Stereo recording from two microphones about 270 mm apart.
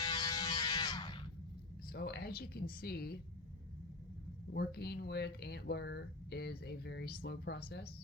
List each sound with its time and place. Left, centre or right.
0.0 s music: centre
1.9 s speech: left
4.5 s speech: left